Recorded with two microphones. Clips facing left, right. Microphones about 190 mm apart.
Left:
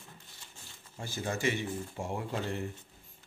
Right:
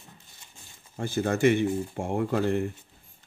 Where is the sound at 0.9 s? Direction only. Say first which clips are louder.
Right 9 dB; 60° right (ahead or behind).